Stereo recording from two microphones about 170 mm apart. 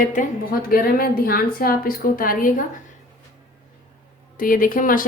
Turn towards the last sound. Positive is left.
turn(degrees=55)  # may be behind; listen again after turning